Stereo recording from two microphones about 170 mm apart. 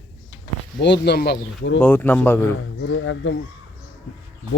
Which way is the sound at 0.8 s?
85° left.